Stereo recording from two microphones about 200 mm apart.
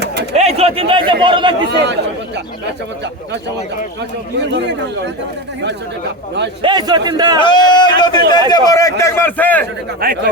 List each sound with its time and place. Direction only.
0.3 s a man's voice: 30° right (ahead or behind)
4.4 s speech: 60° right (ahead or behind)
6.6 s a man's voice: 20° right (ahead or behind)
7.4 s a man's voice: 20° left (ahead or behind)
10.0 s speech: 45° right (ahead or behind)